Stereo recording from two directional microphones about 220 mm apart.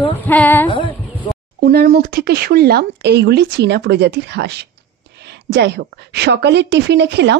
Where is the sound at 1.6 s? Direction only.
50° right (ahead or behind).